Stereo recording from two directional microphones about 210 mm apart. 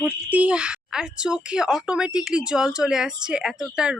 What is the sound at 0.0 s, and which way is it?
A woman's voice, 5° right (ahead or behind).